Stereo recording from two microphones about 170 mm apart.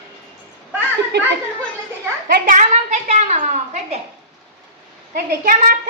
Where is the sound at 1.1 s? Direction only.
80° right.